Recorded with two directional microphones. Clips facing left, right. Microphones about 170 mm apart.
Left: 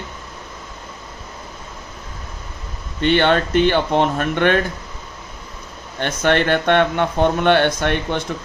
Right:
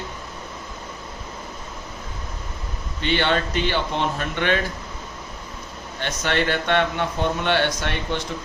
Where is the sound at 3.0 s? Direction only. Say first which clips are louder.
Left 6 dB; 55° left (ahead or behind).